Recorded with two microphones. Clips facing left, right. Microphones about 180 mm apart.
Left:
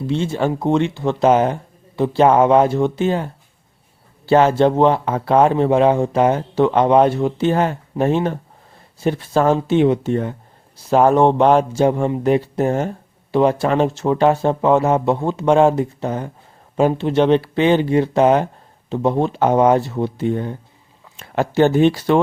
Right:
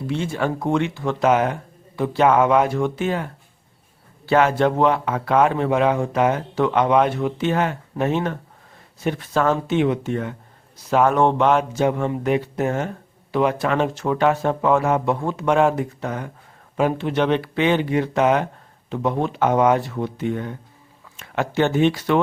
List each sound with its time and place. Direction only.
0.1 s speech: 30° left (ahead or behind)
4.3 s a man's voice: 30° left (ahead or behind)